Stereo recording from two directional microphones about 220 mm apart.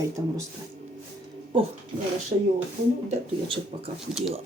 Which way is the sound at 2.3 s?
30° right (ahead or behind).